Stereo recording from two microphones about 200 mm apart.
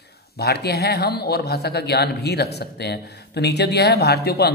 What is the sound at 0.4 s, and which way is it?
A man's voice, 55° left (ahead or behind).